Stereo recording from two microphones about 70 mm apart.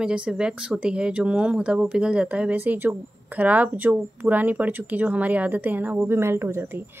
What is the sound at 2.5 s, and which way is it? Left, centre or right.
Speech, right.